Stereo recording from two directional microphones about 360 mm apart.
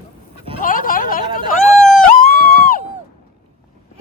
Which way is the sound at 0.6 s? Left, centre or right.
Left.